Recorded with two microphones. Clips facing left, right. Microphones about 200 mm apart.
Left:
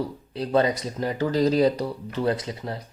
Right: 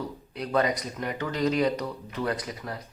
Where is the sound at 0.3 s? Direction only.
30° left (ahead or behind).